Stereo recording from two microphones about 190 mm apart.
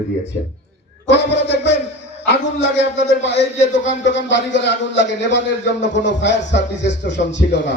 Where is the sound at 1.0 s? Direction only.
65° left (ahead or behind).